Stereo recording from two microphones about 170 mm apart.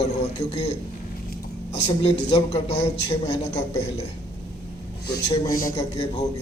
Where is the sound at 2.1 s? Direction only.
40° left (ahead or behind).